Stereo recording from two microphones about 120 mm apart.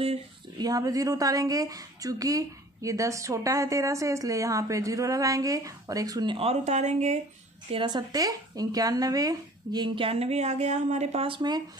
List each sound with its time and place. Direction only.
0.6 s a woman's voice: 30° right (ahead or behind)
6.3 s speech: 60° right (ahead or behind)
7.7 s speech: 40° right (ahead or behind); by 11.2 s 65° right (ahead or behind)
11.2 s speech: 40° right (ahead or behind)